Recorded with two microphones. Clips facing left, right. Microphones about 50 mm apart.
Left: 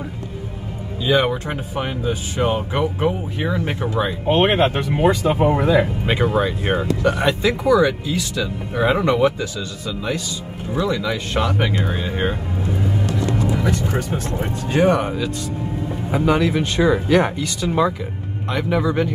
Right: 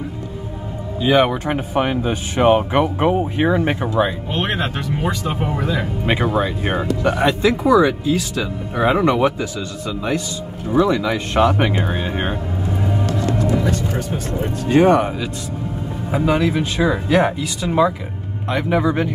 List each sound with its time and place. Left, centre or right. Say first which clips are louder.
1.0 s speech: right 3 dB; right
4.3 s speech: left 6 dB; left
6.0 s speech: even; centre
7.4 s speech: right 2 dB; right
8.2 s speech: right 1 dB; centre
9.8 s speech: right 3 dB; centre
14.7 s speech: right 4 dB; centre